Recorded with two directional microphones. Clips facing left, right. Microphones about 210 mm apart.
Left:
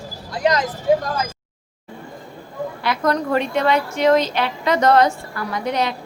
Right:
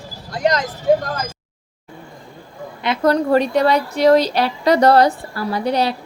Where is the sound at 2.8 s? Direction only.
30° right (ahead or behind).